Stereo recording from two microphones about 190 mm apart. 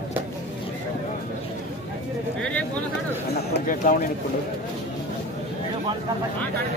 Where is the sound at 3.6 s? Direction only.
45° left (ahead or behind).